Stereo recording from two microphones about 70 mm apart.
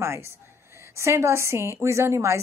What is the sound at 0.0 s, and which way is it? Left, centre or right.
A woman's voice, right.